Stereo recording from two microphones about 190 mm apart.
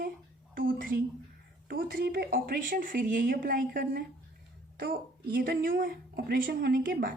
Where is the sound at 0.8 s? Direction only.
50° right (ahead or behind).